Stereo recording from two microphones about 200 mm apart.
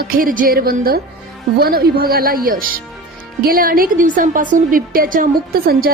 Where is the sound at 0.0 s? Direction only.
45° right (ahead or behind).